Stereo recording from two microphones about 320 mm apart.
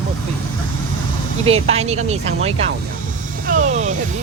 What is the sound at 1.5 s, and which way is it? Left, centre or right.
Speech, centre.